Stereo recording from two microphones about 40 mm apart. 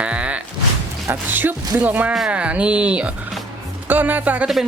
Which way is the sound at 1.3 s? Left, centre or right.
Right.